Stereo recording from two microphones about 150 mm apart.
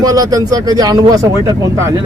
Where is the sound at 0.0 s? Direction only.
25° right (ahead or behind).